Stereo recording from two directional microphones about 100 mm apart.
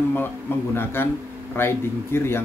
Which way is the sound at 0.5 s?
20° left (ahead or behind).